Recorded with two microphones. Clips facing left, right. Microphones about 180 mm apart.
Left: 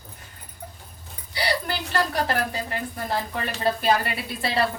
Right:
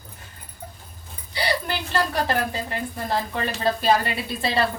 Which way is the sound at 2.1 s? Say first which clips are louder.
Right 1 dB; 25° right (ahead or behind).